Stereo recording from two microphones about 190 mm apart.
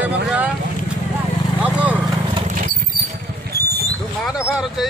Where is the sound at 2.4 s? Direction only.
45° right (ahead or behind).